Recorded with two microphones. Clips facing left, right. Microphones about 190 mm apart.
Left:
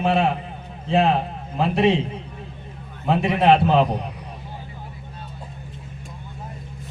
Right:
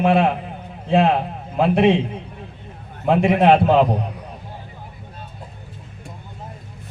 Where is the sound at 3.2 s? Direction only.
55° right (ahead or behind).